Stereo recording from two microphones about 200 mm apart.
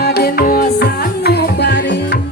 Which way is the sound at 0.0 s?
50° left (ahead or behind).